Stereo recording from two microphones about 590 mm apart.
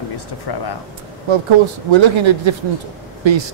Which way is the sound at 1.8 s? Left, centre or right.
Right.